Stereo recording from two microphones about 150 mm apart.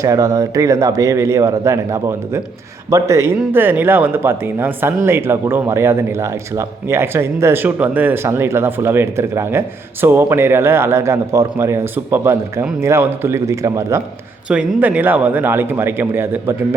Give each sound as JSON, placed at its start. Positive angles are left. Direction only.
{"t": 0.0, "sound": "speech", "side_deg": -20}
{"t": 14.4, "sound": "speech", "side_deg": -5}